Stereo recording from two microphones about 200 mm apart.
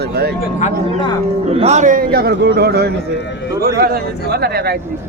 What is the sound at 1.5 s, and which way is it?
A man's voice, 35° right (ahead or behind).